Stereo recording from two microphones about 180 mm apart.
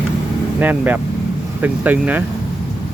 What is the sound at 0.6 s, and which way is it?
Speech, 10° right (ahead or behind).